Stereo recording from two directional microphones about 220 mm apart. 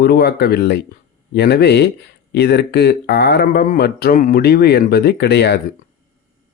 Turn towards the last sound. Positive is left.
turn(degrees=50)  # may be behind; listen again after turning